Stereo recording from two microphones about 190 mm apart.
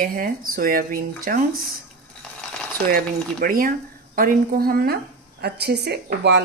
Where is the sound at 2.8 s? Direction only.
50° right (ahead or behind).